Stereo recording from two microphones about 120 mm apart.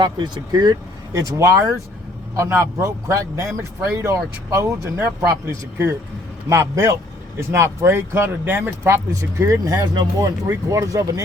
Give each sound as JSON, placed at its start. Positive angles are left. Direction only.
{"t": 0.0, "sound": "speech", "side_deg": -40}